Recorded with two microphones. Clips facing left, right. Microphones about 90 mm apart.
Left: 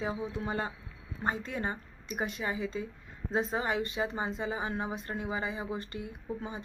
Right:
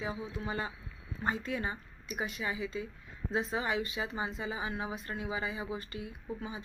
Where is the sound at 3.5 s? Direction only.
45° left (ahead or behind).